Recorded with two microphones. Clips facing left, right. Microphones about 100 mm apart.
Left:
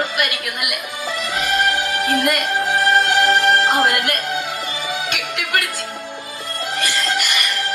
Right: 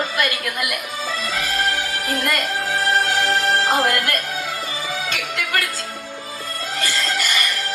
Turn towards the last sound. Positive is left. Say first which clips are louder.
# left 1 dB
turn(degrees=20)  # may be behind; listen again after turning